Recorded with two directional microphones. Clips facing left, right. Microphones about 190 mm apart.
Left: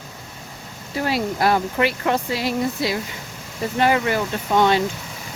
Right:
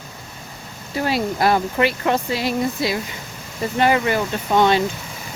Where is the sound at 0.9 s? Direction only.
25° right (ahead or behind).